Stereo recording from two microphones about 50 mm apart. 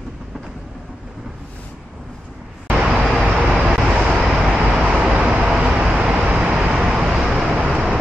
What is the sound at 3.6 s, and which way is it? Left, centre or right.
Vehicle, centre.